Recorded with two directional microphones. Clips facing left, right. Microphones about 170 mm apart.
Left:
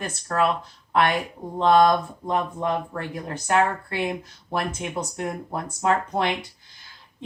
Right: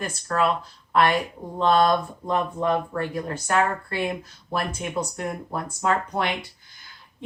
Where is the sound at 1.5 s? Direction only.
15° left (ahead or behind).